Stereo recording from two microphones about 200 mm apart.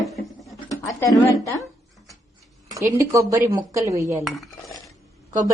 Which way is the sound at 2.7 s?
15° right (ahead or behind).